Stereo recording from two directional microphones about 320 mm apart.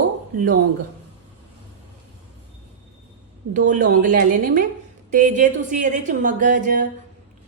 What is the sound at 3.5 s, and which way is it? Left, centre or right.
Speech, right.